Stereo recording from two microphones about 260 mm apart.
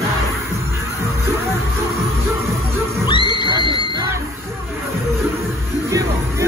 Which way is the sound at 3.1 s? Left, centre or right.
Centre.